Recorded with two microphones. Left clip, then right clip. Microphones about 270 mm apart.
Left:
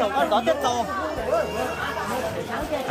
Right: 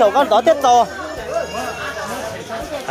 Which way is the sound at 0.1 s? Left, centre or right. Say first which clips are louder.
Right 8 dB; right.